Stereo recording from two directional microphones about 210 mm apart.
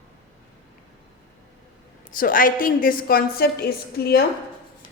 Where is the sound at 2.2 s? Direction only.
40° left (ahead or behind).